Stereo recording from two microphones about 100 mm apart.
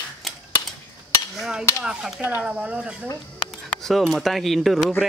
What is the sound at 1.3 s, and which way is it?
Speech, 5° right (ahead or behind).